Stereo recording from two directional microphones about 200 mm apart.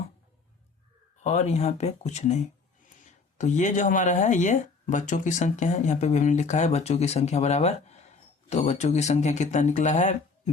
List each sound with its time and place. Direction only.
1.2 s speech: 35° left (ahead or behind)